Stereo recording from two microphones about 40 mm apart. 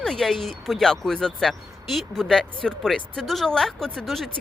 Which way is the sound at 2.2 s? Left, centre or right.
Centre.